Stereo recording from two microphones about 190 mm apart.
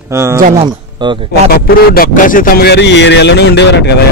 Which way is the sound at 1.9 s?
50° left (ahead or behind).